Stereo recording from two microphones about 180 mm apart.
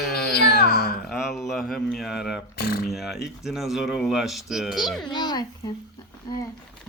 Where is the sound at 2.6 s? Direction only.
60° left (ahead or behind).